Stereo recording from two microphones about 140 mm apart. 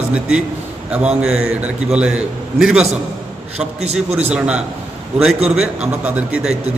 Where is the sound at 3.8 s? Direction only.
50° right (ahead or behind).